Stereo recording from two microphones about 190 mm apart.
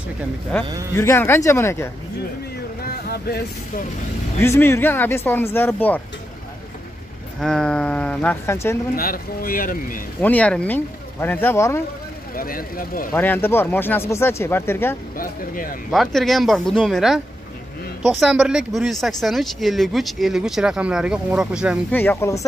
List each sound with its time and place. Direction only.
0.5 s speech: 5° left (ahead or behind)
2.8 s vehicle: 55° left (ahead or behind)
4.4 s speech: 15° left (ahead or behind)
7.3 s speech: 5° left (ahead or behind)
8.9 s speech: 50° left (ahead or behind)
10.2 s speech: 5° left (ahead or behind)
12.4 s speech: 50° left (ahead or behind)
13.1 s speech: 10° left (ahead or behind)
15.1 s speech: 45° left (ahead or behind)
15.9 s speech: centre (ahead or behind)
18.2 s speech: 5° right (ahead or behind)
21.9 s speech: 10° left (ahead or behind)